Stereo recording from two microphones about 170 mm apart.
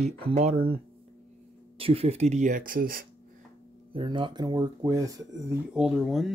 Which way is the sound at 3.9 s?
30° right (ahead or behind).